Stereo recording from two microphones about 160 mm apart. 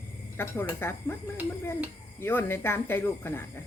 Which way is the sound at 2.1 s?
15° left (ahead or behind).